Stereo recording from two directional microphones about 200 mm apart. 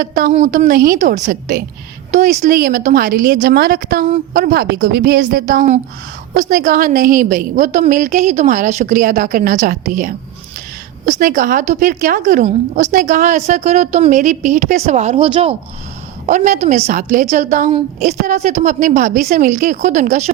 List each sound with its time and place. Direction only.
0.0 s a woman's voice: 45° right (ahead or behind)